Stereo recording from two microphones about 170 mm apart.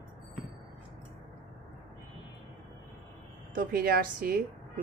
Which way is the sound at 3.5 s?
55° right (ahead or behind).